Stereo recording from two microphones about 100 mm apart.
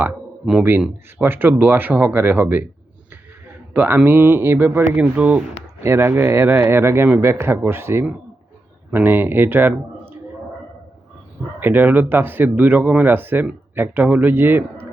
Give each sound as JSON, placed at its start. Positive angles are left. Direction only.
{"t": 0.4, "sound": "speech", "side_deg": -5}
{"t": 1.2, "sound": "speech", "side_deg": -20}
{"t": 4.9, "sound": "speech", "side_deg": -15}
{"t": 5.8, "sound": "speech", "side_deg": -25}
{"t": 11.6, "sound": "speech", "side_deg": -20}